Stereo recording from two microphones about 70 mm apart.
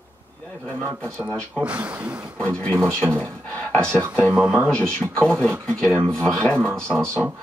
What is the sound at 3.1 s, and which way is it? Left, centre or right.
Speech, centre.